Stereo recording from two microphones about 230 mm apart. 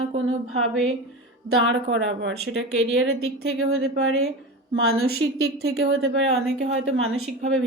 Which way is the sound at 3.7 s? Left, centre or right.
Right.